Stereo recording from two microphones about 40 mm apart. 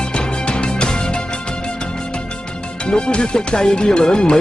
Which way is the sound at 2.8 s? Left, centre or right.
Left.